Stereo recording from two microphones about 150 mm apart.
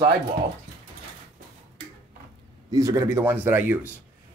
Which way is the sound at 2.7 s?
20° right (ahead or behind).